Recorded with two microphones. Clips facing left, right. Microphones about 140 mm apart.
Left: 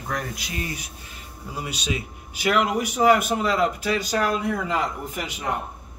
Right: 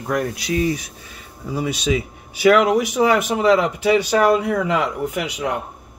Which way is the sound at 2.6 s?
90° right.